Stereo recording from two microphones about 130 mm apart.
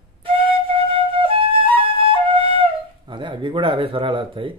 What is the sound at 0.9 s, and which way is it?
Flute, 45° right (ahead or behind).